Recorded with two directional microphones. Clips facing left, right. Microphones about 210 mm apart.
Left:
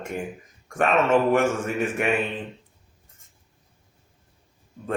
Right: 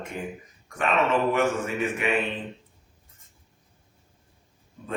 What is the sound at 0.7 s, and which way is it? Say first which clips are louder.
Speech: left 4 dB; 45° left (ahead or behind).